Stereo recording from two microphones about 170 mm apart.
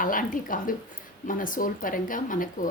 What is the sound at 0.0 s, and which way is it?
A woman's voice, 55° left (ahead or behind).